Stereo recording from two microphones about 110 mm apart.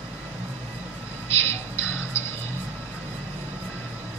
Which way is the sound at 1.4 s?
25° left (ahead or behind).